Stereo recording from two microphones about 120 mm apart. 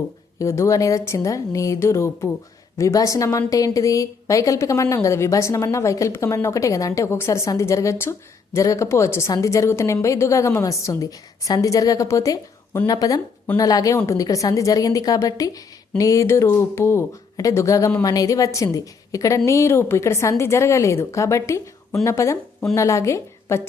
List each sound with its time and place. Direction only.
0.3 s a woman's voice: 25° left (ahead or behind)